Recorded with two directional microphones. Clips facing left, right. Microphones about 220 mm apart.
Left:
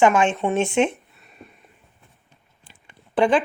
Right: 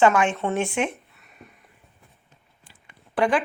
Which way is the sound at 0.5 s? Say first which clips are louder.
Left 5 dB; 25° left (ahead or behind).